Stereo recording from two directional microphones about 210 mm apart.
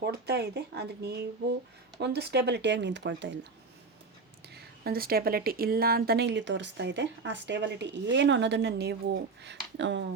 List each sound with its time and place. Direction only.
0.0 s speech: 50° right (ahead or behind)
4.4 s speech: 50° right (ahead or behind)